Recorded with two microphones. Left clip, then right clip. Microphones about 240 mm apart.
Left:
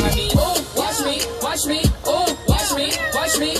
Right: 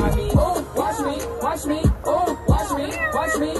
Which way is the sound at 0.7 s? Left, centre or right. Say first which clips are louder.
Left 2 dB; left.